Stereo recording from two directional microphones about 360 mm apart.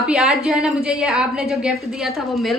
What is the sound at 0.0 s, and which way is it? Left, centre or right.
A woman's voice, centre.